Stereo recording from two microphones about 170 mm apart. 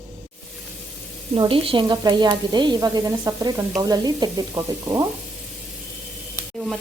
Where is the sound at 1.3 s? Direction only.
30° right (ahead or behind).